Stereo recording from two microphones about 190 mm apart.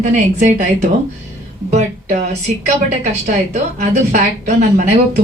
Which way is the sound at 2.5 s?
40° right (ahead or behind).